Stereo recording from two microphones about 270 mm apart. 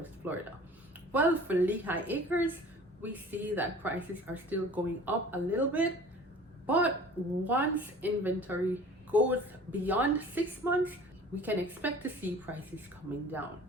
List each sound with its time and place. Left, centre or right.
0.2 s a woman's voice: centre